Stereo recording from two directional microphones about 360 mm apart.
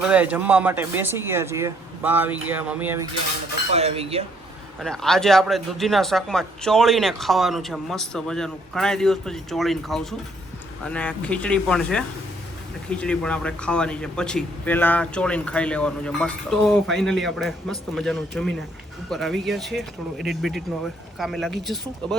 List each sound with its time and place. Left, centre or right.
0.1 s a man's voice: centre
3.7 s speech: centre
4.8 s a man's voice: centre